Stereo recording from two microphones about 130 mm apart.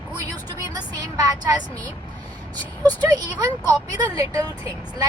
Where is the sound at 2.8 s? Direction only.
30° right (ahead or behind).